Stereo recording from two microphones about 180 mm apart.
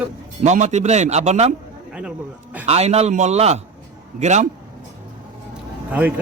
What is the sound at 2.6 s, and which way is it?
A man's voice, 35° right (ahead or behind).